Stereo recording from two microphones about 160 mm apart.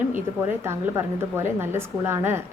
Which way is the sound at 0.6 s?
15° right (ahead or behind).